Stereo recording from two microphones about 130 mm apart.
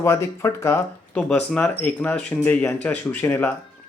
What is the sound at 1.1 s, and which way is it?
Speech, 10° left (ahead or behind).